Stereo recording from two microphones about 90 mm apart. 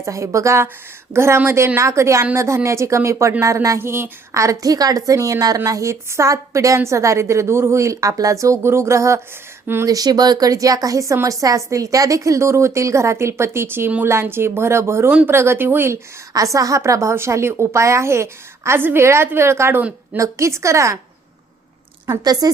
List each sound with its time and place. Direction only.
0.0 s speech: 35° right (ahead or behind)
9.8 s speech: 45° right (ahead or behind); by 16.0 s 25° right (ahead or behind)
16.3 s speech: 40° right (ahead or behind)
22.0 s speech: 45° right (ahead or behind)